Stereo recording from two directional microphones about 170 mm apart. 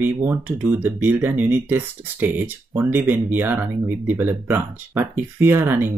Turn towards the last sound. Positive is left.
turn(degrees=-10)  # may be behind; listen again after turning